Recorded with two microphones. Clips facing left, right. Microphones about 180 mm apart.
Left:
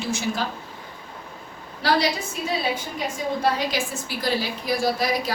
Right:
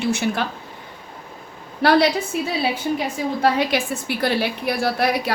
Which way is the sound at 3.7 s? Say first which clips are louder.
Right 5 dB; 60° right (ahead or behind).